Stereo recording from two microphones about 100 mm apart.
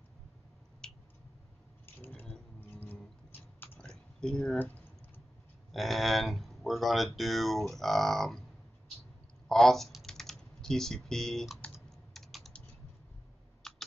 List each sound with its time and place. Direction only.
0.8 s a sound: 5° left (ahead or behind)
2.0 s squish: 20° left (ahead or behind)
2.7 s livestock: 20° left (ahead or behind)
3.8 s a sound: 5° left (ahead or behind)
4.6 s typing: 20° left (ahead or behind)
5.7 s speech: centre (ahead or behind)
9.5 s speech: 5° left (ahead or behind)
12.1 s typing: centre (ahead or behind)
13.6 s computer keyboard: 5° left (ahead or behind)